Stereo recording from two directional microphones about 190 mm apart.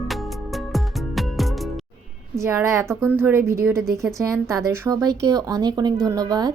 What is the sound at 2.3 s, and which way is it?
A woman's voice, 15° right (ahead or behind).